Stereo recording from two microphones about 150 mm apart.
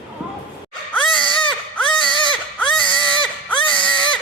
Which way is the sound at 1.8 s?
35° left (ahead or behind).